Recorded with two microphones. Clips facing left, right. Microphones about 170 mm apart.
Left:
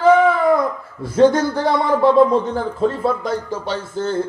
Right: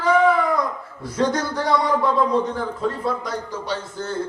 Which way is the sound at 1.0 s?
25° left (ahead or behind).